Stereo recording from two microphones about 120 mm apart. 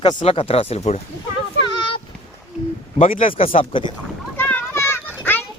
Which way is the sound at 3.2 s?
50° left (ahead or behind).